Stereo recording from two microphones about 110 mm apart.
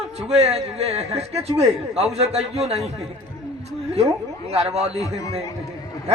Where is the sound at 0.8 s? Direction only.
70° right (ahead or behind).